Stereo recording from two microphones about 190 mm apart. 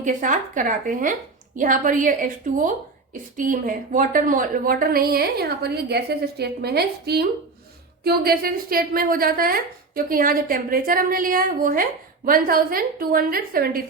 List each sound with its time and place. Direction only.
0.0 s a woman's voice: 40° right (ahead or behind)